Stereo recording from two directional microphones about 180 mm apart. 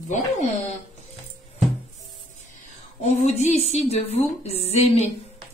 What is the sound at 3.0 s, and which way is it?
Speech, 40° left (ahead or behind).